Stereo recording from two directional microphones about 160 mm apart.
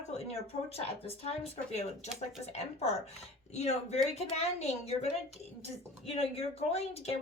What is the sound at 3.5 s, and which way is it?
A woman's voice, 45° left (ahead or behind).